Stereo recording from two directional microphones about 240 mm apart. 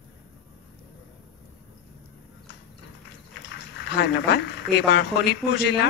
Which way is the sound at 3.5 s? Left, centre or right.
Left.